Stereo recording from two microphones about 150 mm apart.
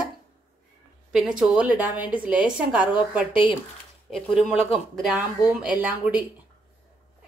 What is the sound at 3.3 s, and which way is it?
Speech, 35° left (ahead or behind).